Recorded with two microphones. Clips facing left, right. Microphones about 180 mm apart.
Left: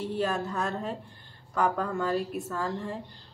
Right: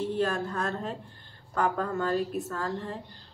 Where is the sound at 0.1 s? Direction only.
10° left (ahead or behind).